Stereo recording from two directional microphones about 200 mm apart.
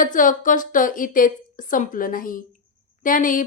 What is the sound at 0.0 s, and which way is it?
A woman's voice, 40° left (ahead or behind).